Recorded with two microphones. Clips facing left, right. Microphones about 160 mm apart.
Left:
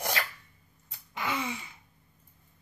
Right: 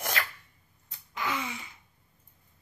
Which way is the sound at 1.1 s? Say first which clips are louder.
Even; 30° left (ahead or behind).